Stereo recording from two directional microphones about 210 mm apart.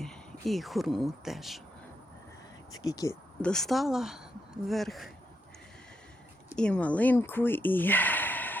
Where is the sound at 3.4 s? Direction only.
5° left (ahead or behind).